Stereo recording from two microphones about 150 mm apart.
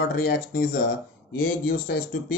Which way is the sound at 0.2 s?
80° left.